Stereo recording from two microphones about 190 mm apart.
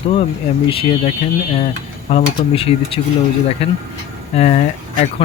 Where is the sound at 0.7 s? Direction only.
30° left (ahead or behind).